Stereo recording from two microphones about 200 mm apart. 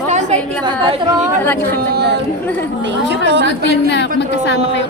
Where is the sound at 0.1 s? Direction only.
35° right (ahead or behind).